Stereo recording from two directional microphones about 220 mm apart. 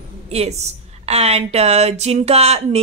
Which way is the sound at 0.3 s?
30° right (ahead or behind).